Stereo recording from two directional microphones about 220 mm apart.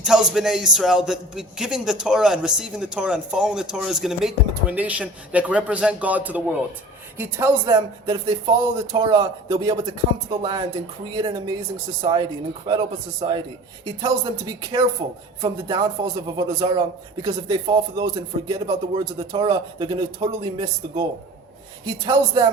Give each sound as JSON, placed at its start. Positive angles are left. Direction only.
{"t": 0.0, "sound": "a man's voice", "side_deg": 0}
{"t": 13.8, "sound": "speech", "side_deg": -20}